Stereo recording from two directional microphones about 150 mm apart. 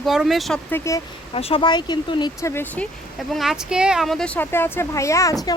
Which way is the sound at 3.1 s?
Centre (ahead or behind).